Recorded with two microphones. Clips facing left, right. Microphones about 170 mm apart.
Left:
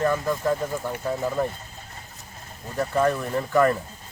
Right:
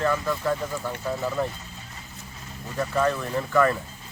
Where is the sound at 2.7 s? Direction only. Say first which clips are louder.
Left 2 dB; 20° left (ahead or behind).